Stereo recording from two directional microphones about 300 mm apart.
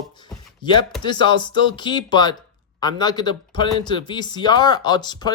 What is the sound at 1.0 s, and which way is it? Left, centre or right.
Speech, centre.